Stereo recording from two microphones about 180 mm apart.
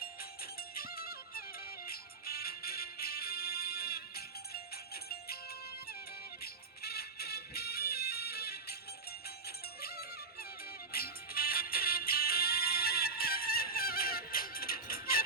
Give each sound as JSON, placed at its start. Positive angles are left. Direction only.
{"t": 0.8, "sound": "music", "side_deg": 55}
{"t": 6.4, "sound": "music", "side_deg": 60}
{"t": 9.8, "sound": "music", "side_deg": 60}